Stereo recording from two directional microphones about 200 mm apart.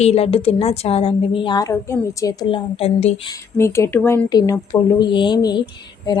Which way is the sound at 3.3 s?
15° left (ahead or behind).